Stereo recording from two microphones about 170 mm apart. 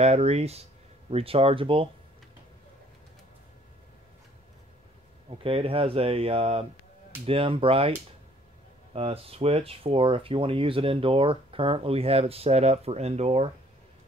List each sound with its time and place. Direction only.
0.0 s speech: 40° right (ahead or behind)
5.4 s speech: 35° right (ahead or behind)
8.9 s speech: 35° right (ahead or behind)